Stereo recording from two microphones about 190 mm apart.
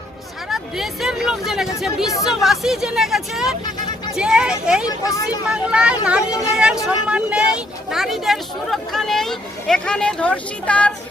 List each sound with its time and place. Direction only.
0.5 s a woman's voice: centre (ahead or behind)
4.9 s speech: 20° left (ahead or behind)
5.5 s a woman's voice: 5° right (ahead or behind)